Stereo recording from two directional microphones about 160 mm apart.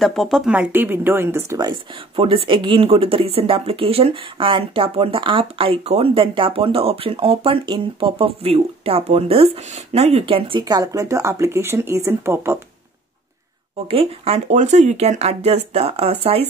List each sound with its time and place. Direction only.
0.0 s speech: centre (ahead or behind); by 10.6 s 35° right (ahead or behind)
10.6 s speech: 20° right (ahead or behind)
13.8 s speech: 40° right (ahead or behind)